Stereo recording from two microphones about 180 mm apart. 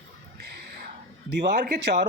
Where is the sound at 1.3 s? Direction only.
70° right (ahead or behind).